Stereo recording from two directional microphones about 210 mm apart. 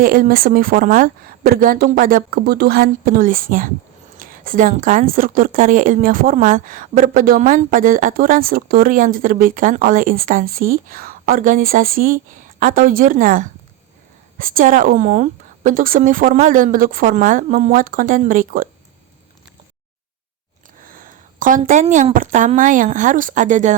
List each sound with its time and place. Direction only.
0.0 s a woman's voice: 45° right (ahead or behind)
21.0 s a woman's voice: 40° right (ahead or behind)